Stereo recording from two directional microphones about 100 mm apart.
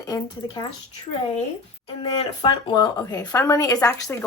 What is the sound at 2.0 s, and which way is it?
Speech, 50° left (ahead or behind).